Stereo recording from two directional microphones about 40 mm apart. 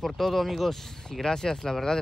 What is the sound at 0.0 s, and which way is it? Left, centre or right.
Speech, centre.